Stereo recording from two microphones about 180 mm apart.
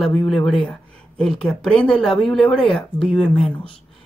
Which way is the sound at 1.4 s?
Centre (ahead or behind).